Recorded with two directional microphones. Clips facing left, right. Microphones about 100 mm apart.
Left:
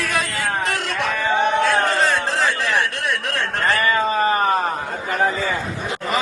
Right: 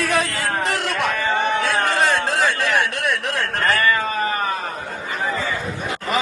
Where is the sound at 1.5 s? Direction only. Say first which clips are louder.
Left 3 dB; 60° left (ahead or behind).